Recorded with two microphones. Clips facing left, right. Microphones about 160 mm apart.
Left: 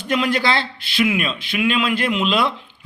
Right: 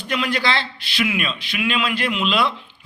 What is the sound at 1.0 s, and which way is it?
Speech, 35° left (ahead or behind).